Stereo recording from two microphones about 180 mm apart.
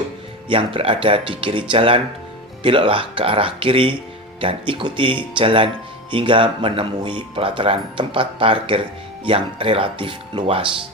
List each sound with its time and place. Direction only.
0.5 s speech: 30° right (ahead or behind)